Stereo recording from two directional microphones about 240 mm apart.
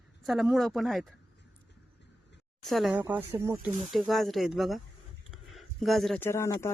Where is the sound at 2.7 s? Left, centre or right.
Centre.